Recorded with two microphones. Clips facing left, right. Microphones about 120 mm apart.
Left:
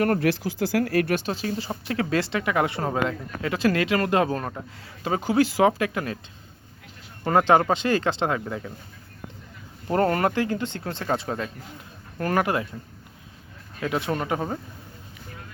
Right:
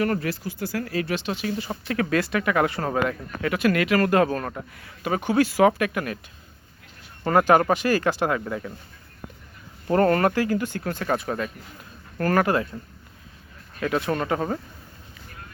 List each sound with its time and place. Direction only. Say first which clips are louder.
0.2 s speech: left 5 dB; 85° left; by 1.3 s 55° left (ahead or behind)
1.3 s speech: even; 35° left (ahead or behind)
7.3 s speech: right 1 dB; 20° left (ahead or behind)
9.9 s speech: right 2 dB; 20° left (ahead or behind)
13.7 s speech: right 2 dB; 20° left (ahead or behind)